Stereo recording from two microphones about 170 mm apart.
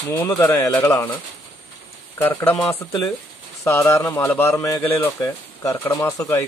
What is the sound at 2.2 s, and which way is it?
Speech, 10° left (ahead or behind).